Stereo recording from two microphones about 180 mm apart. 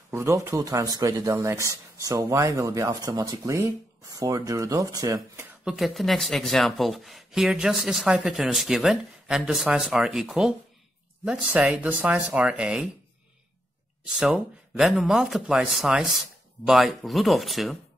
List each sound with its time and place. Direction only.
0.1 s speech: 15° right (ahead or behind)
5.6 s speech: 5° right (ahead or behind)
14.0 s speech: 5° right (ahead or behind)